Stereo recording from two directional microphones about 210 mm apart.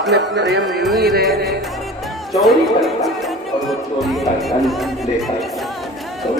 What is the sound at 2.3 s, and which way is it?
Speech, centre (ahead or behind).